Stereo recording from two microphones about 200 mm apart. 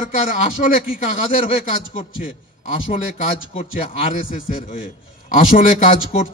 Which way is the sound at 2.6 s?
40° left (ahead or behind).